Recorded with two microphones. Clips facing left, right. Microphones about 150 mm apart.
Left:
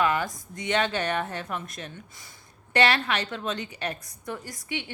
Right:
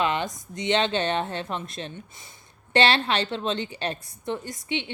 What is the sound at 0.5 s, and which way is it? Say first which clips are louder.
A woman's voice: right 3 dB; 25° right (ahead or behind).